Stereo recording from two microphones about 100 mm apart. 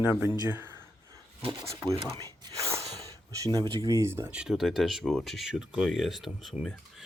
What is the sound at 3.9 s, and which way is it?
Speech, 30° right (ahead or behind).